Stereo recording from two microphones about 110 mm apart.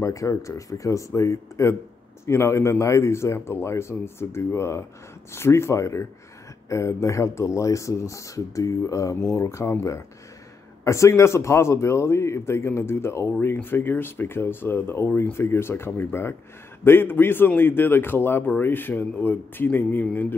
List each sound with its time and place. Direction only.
0.0 s a man's voice: 30° left (ahead or behind)
20.1 s music: 15° left (ahead or behind)